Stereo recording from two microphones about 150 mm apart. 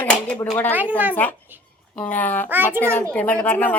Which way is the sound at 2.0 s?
10° left (ahead or behind).